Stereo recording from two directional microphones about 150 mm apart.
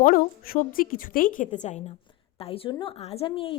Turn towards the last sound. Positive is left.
turn(degrees=35)  # may be behind; listen again after turning